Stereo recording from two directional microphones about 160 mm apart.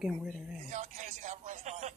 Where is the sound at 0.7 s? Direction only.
50° right (ahead or behind).